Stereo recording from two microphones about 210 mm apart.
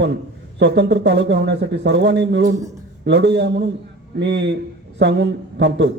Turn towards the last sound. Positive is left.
turn(degrees=-55)  # may be behind; listen again after turning